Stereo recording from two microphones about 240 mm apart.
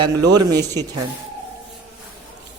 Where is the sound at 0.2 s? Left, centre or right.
Centre.